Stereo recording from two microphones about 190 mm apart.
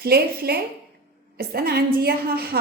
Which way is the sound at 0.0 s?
55° right (ahead or behind).